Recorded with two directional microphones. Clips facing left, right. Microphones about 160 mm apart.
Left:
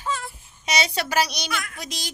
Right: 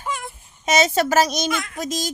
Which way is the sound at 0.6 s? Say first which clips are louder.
Right 7 dB; 45° right (ahead or behind).